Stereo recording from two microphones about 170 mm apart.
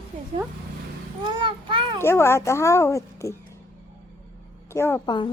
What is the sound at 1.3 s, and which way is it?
Speech, 30° right (ahead or behind).